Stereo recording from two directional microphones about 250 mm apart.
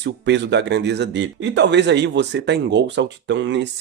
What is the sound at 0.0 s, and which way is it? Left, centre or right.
Speech, right.